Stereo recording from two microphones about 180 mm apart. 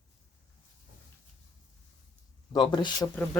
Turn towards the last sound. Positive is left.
turn(degrees=5)  # may be behind; listen again after turning